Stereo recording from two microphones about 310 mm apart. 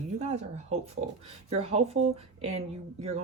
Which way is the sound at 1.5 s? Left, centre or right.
Right.